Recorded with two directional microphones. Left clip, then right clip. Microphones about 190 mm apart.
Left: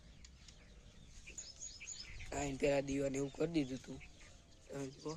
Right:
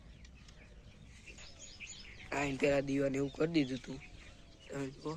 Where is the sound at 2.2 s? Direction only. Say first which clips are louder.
Right 4 dB; 10° left (ahead or behind).